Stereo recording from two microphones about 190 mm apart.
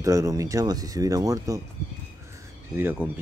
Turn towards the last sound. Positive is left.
turn(degrees=-10)  # may be behind; listen again after turning